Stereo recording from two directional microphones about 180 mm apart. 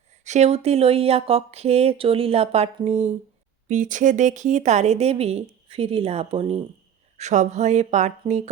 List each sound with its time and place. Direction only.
0.3 s speech: 40° right (ahead or behind)